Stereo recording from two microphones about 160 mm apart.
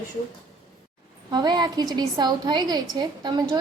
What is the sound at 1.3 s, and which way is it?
A woman's voice, 25° right (ahead or behind).